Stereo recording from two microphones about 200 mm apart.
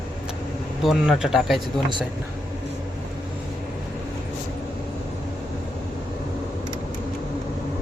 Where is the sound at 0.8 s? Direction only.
Centre (ahead or behind).